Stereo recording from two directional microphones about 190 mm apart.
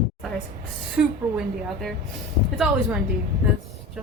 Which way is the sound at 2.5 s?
5° right (ahead or behind).